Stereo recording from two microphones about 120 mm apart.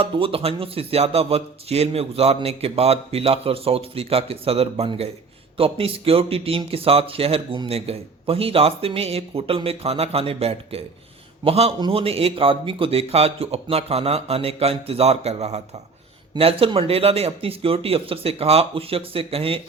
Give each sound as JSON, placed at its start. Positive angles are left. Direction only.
{"t": 0.0, "sound": "a man's voice", "side_deg": -50}
{"t": 16.4, "sound": "a man's voice", "side_deg": -50}